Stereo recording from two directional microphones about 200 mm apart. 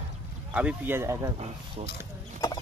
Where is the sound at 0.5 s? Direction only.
10° right (ahead or behind).